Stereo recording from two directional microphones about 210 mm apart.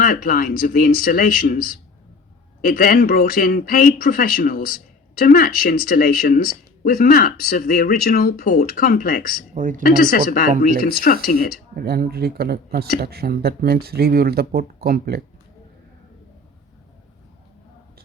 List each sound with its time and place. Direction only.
0.0 s speech: 45° left (ahead or behind)
9.6 s speech: 40° right (ahead or behind)
9.8 s speech: 45° left (ahead or behind)
11.8 s speech: 45° right (ahead or behind)